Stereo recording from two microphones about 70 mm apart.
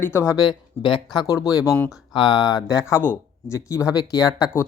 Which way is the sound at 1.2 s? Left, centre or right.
Left.